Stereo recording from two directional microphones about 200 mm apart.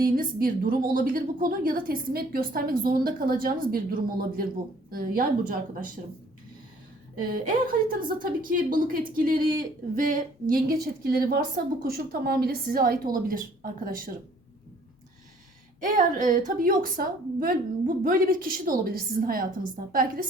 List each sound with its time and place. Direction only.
0.0 s a woman's voice: 45° right (ahead or behind)
7.3 s a woman's voice: 45° right (ahead or behind)
15.8 s a woman's voice: 40° right (ahead or behind)